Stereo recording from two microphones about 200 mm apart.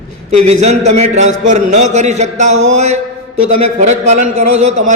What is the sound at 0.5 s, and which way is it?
A man's voice, 35° right (ahead or behind).